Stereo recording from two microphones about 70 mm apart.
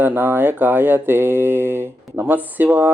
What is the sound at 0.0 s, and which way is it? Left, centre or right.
Speech, right.